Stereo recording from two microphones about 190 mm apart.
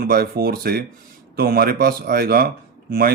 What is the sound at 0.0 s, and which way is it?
Speech, 55° right (ahead or behind).